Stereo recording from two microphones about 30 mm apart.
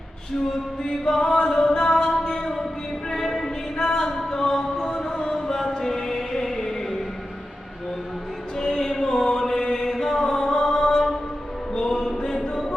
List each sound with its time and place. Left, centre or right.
1.0 s music: centre
2.3 s a sound: centre
3.1 s music: centre
3.4 s a sound: centre
4.3 s music: centre
8.5 s music: centre
9.6 s chant: left
9.8 s mantra: centre
11.7 s a sound: centre